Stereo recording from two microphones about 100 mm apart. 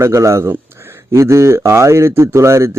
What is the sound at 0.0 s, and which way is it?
Speech, 30° right (ahead or behind).